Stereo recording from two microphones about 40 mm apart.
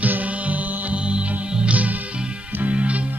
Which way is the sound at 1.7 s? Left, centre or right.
Right.